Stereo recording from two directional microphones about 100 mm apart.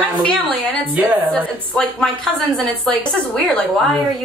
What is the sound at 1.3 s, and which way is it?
A woman's voice, 5° left (ahead or behind).